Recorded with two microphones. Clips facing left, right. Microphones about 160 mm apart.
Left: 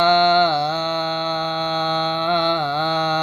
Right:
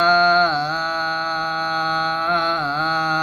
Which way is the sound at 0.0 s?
20° left (ahead or behind).